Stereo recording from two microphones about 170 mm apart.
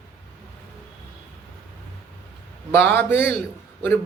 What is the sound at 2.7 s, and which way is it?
Speech, 10° left (ahead or behind).